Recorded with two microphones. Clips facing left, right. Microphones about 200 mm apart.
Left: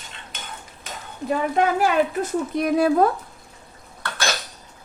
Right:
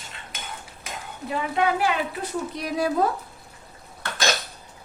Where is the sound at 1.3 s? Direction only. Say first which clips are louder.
Left 3 dB; 45° left (ahead or behind).